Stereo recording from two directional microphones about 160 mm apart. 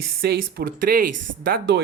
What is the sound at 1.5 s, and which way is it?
Speech, 90° right.